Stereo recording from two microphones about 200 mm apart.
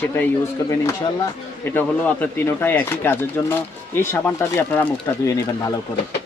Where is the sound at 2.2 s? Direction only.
10° left (ahead or behind).